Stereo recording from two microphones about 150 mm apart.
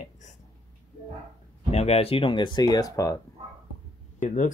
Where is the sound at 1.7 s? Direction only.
45° left (ahead or behind); by 3.2 s 25° left (ahead or behind).